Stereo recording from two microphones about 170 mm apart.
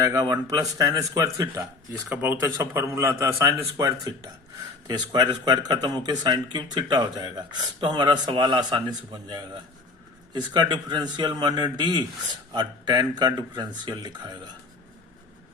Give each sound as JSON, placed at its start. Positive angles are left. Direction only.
{"t": 0.1, "sound": "speech", "side_deg": -20}
{"t": 1.9, "sound": "a man's voice", "side_deg": -10}